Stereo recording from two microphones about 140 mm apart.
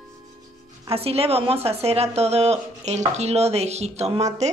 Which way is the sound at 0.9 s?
45° right (ahead or behind).